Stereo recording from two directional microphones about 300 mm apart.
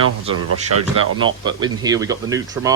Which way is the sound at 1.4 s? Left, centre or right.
Centre.